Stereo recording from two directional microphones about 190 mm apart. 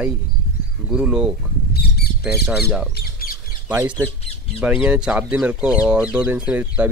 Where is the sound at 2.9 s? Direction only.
50° left (ahead or behind).